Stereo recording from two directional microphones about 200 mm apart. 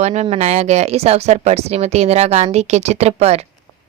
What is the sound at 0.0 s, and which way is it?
Speech, 35° right (ahead or behind).